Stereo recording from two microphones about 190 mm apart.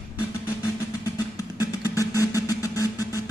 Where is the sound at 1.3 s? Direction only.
15° left (ahead or behind).